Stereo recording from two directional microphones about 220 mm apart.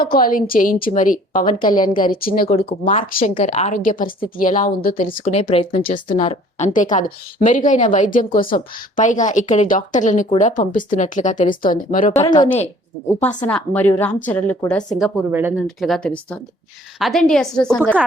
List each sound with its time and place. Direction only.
0.0 s a woman's voice: 40° left (ahead or behind)
13.5 s a woman's voice: 10° left (ahead or behind)
14.9 s a woman's voice: 5° right (ahead or behind)
15.6 s a woman's voice: centre (ahead or behind)